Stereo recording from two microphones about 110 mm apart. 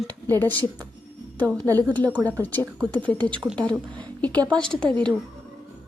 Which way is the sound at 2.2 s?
30° right (ahead or behind).